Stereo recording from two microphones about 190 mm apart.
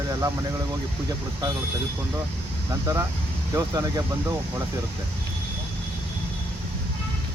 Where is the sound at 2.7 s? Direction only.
15° right (ahead or behind).